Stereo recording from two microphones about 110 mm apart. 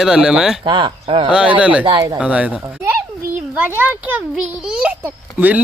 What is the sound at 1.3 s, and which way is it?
A child's voice, 10° right (ahead or behind).